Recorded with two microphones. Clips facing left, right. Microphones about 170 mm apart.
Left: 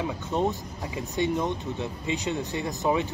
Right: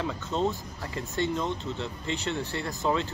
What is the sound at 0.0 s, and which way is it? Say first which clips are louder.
A man's voice: left 2 dB; 15° left (ahead or behind).